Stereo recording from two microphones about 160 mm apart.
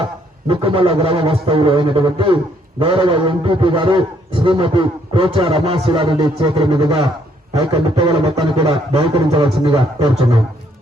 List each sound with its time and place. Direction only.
0.0 s speech: 35° right (ahead or behind)
7.5 s a sound: 25° right (ahead or behind)
8.5 s speech: 30° right (ahead or behind)